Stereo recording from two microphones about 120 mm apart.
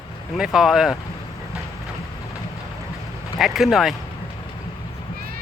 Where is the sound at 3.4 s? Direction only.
Centre (ahead or behind).